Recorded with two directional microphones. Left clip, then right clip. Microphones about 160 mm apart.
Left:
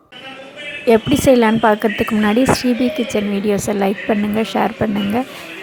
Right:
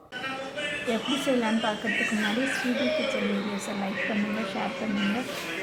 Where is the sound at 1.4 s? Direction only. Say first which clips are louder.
Left 14 dB; 55° left (ahead or behind).